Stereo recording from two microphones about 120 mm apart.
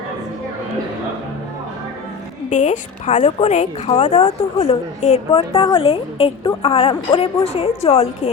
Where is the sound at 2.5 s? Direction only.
90° left.